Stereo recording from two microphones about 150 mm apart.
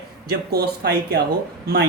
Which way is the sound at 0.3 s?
90° right.